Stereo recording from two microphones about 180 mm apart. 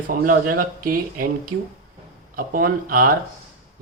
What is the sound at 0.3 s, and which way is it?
Speech, 50° right (ahead or behind).